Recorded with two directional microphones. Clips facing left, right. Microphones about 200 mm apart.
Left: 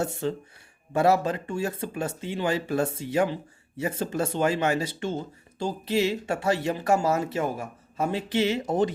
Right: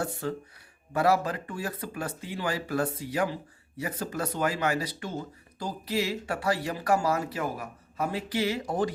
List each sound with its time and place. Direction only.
0.0 s speech: 25° left (ahead or behind)